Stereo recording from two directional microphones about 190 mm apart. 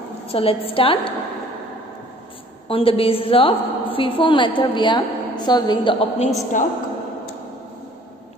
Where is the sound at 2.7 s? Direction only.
30° left (ahead or behind).